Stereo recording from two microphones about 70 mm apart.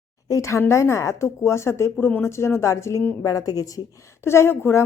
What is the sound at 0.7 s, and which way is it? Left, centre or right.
Speech, left.